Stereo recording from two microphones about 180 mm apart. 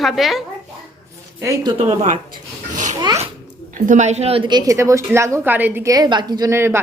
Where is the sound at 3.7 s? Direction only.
45° right (ahead or behind); by 6.8 s 15° right (ahead or behind).